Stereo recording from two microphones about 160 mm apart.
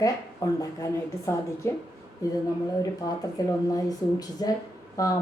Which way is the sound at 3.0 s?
25° left (ahead or behind).